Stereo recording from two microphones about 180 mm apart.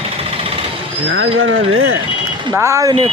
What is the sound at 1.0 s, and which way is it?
Speech, 90° right.